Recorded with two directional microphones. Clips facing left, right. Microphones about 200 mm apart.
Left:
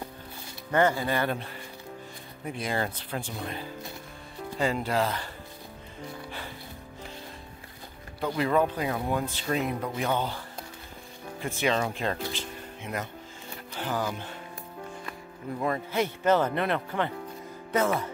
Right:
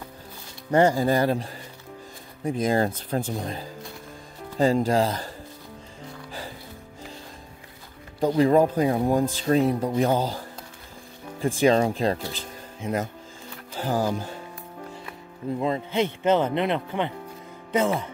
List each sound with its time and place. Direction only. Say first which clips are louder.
0.7 s speech: right 5 dB; 35° right (ahead or behind)
2.5 s speech: right 8 dB; 40° right (ahead or behind)
8.2 s speech: right 7 dB; 35° right (ahead or behind)
11.4 s speech: right 8 dB; 35° right (ahead or behind)
13.7 s speech: right 6 dB; 40° right (ahead or behind)
15.6 s speech: right 3 dB; 20° right (ahead or behind)